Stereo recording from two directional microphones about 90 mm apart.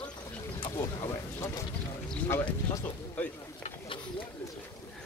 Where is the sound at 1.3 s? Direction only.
35° left (ahead or behind).